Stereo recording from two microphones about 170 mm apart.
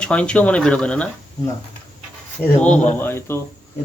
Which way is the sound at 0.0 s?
5° left (ahead or behind).